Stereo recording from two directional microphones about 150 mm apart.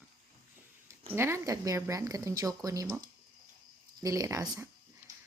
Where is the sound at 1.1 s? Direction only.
15° right (ahead or behind).